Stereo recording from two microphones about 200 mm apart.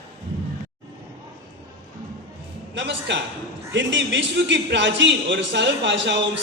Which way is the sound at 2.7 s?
65° right (ahead or behind).